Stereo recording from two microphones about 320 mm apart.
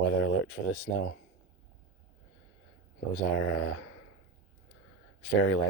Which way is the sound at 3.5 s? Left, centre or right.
Left.